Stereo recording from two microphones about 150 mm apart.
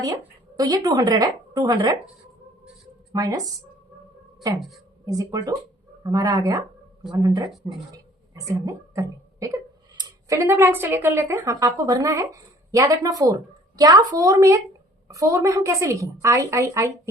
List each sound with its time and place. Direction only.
0.0 s speech: 25° right (ahead or behind)
3.1 s speech: 25° right (ahead or behind)
5.0 s a woman's voice: 20° right (ahead or behind)